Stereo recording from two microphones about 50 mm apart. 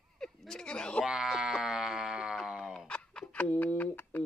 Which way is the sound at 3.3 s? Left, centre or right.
Left.